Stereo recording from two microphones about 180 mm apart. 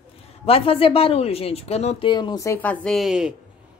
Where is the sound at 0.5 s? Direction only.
30° left (ahead or behind).